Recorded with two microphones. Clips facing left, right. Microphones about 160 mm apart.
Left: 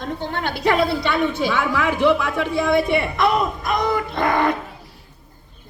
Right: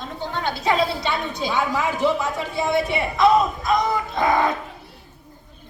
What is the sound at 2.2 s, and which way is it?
Speech, 55° left (ahead or behind).